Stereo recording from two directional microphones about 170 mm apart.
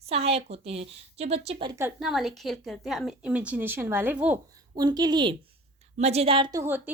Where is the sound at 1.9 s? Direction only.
Centre (ahead or behind).